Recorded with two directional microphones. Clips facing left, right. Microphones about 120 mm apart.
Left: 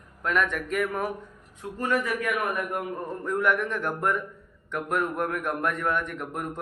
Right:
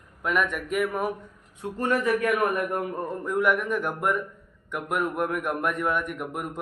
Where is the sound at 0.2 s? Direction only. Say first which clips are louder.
Even; 10° right (ahead or behind).